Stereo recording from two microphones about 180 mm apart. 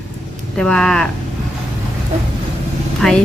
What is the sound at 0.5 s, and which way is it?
Speech, 5° left (ahead or behind).